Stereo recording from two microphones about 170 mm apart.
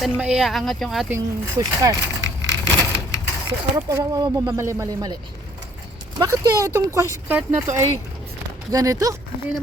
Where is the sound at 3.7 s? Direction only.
20° right (ahead or behind).